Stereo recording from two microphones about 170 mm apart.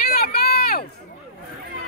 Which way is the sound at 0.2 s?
65° left (ahead or behind).